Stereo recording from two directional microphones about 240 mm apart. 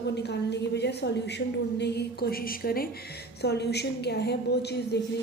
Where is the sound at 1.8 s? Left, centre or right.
Left.